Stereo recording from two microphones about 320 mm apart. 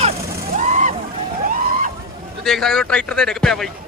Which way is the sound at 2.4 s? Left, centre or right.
Centre.